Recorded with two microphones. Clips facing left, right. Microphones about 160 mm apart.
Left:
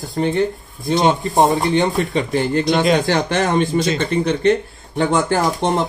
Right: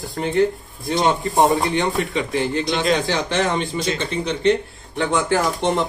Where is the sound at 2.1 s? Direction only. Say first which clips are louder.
Left 3 dB; 40° left (ahead or behind).